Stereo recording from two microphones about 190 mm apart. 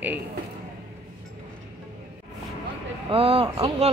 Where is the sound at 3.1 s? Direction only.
30° right (ahead or behind).